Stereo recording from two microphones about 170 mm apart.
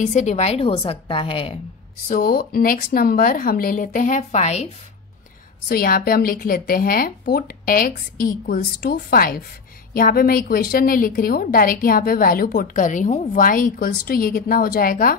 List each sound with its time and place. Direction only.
0.0 s a woman's voice: 45° left (ahead or behind)
2.0 s a woman's voice: 60° left (ahead or behind); by 4.6 s 40° left (ahead or behind)
5.7 s a woman's voice: 60° left (ahead or behind)